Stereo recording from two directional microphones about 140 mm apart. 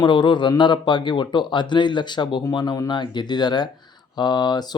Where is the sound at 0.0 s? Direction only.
35° left (ahead or behind).